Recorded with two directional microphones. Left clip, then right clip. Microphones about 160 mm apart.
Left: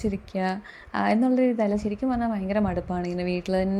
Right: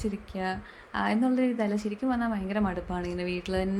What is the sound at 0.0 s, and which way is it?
Speech, 35° left (ahead or behind).